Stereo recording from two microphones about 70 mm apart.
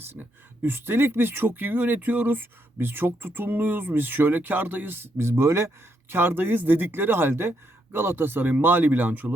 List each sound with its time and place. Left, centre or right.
0.1 s speech: right